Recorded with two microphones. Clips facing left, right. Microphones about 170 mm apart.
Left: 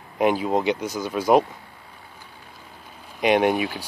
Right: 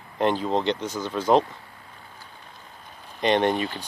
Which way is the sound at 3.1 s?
10° left (ahead or behind).